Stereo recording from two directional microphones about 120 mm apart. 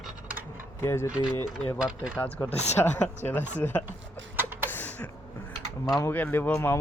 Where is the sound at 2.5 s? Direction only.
65° left (ahead or behind).